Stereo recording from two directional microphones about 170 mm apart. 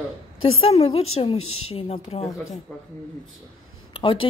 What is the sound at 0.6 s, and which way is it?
A woman's voice, 35° left (ahead or behind).